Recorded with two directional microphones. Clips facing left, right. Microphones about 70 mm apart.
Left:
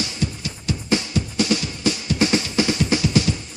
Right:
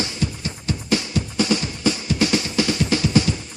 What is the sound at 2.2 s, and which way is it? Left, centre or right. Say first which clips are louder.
Music: left 1 dB; left.